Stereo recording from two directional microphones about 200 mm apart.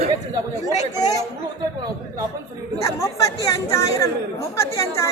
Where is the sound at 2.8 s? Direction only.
15° left (ahead or behind).